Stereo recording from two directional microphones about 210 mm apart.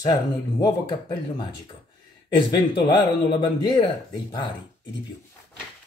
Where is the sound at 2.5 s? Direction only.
20° left (ahead or behind).